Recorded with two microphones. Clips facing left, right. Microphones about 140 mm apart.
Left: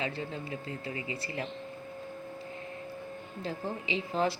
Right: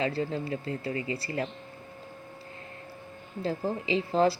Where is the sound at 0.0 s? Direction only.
35° right (ahead or behind).